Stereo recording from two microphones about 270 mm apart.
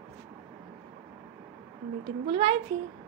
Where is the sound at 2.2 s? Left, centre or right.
Right.